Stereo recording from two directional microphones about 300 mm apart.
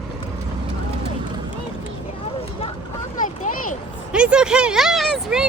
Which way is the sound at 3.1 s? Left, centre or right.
Left.